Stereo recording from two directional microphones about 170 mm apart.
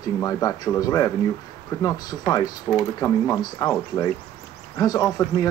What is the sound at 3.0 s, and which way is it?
Speech, 15° left (ahead or behind).